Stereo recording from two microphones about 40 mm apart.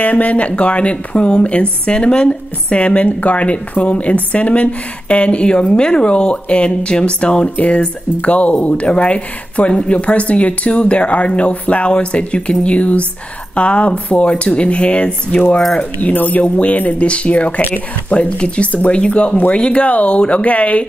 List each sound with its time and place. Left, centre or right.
0.0 s speech: left
7.5 s speech: left